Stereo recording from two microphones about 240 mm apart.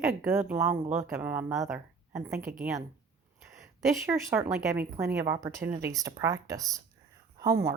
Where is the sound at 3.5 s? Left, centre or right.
Centre.